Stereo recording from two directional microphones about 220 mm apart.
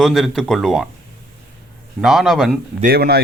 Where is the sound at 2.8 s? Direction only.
40° right (ahead or behind).